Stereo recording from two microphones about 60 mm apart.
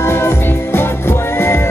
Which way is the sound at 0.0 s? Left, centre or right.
Left.